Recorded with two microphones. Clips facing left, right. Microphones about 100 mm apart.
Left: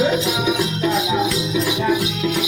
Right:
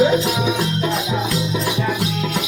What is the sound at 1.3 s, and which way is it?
Music, 35° right (ahead or behind).